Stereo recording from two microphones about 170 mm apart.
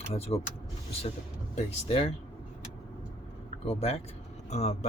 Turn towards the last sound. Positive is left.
turn(degrees=40)  # may be behind; listen again after turning